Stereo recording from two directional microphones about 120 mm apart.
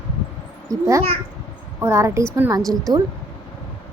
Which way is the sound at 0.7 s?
25° right (ahead or behind).